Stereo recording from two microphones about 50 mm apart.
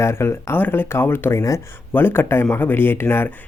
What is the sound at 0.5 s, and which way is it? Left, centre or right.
Speech, left.